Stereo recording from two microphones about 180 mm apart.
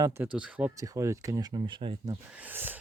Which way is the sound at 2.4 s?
10° right (ahead or behind).